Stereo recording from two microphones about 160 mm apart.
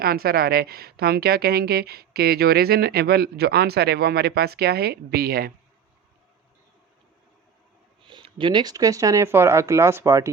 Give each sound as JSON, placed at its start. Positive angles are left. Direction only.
{"t": 0.0, "sound": "a woman's voice", "side_deg": -70}
{"t": 8.0, "sound": "speech", "side_deg": -30}